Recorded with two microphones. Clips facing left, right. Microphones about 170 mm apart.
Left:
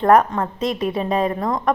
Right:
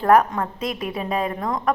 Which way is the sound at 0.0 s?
5° right (ahead or behind).